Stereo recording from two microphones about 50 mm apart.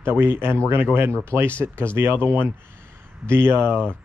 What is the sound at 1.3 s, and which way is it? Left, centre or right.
Speech, right.